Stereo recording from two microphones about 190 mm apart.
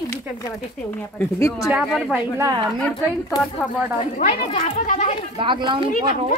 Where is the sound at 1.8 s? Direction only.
Centre (ahead or behind).